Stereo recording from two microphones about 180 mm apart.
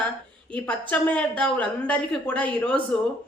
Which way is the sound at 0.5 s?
5° left (ahead or behind).